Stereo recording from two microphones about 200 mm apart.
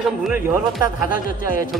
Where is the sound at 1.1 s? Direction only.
45° left (ahead or behind).